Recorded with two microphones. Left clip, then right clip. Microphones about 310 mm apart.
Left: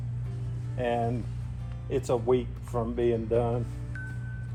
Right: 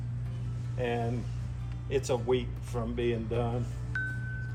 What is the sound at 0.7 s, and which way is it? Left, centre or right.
Speech, left.